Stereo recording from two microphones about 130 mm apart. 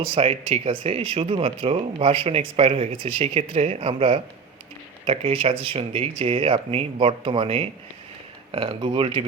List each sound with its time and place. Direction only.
0.0 s speech: 45° right (ahead or behind)